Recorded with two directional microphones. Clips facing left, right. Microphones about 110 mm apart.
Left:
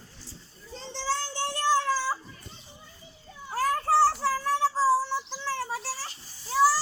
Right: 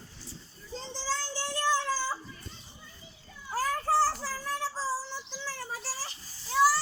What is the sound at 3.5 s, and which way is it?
Children playing, 70° left (ahead or behind).